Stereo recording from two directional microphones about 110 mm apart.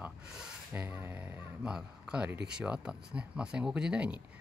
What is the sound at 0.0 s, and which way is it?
Speech, 5° right (ahead or behind).